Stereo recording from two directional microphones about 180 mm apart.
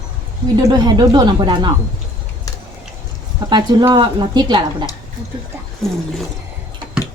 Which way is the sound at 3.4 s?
25° right (ahead or behind).